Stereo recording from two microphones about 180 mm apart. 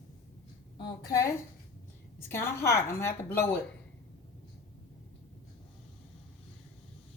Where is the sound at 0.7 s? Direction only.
20° left (ahead or behind).